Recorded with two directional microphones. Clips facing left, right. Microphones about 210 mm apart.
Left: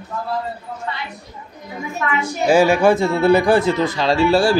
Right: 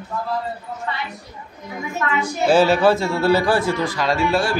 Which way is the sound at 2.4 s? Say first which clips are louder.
Left 1 dB; 10° left (ahead or behind).